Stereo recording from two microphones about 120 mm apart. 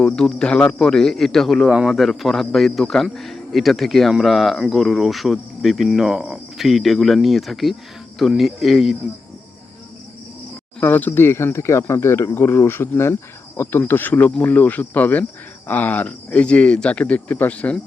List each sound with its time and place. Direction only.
0.0 s speech: 5° left (ahead or behind)
10.8 s speech: 15° left (ahead or behind)